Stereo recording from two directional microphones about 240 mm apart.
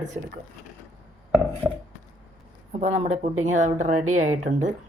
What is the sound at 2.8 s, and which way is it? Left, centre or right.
Speech, right.